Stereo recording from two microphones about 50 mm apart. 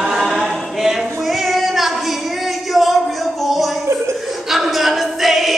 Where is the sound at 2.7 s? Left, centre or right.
Centre.